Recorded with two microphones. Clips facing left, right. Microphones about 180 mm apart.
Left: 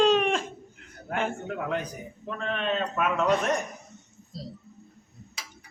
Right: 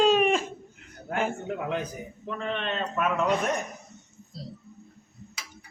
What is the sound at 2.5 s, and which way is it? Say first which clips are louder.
Speech: left 4 dB; centre (ahead or behind).